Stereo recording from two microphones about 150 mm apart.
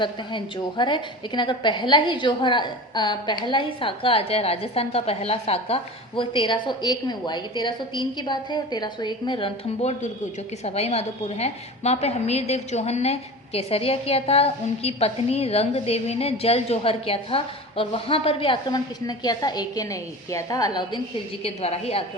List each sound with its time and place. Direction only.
0.0 s a woman's voice: 30° left (ahead or behind)
10.6 s a woman's voice: 45° left (ahead or behind); by 21.0 s 25° left (ahead or behind)
21.4 s a woman's voice: 45° left (ahead or behind)